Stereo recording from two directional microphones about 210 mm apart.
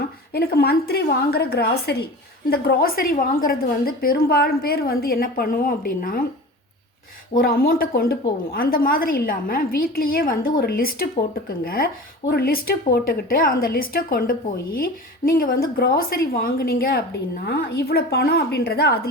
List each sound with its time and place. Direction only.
0.3 s a woman's voice: 50° left (ahead or behind)
7.3 s a woman's voice: 45° left (ahead or behind)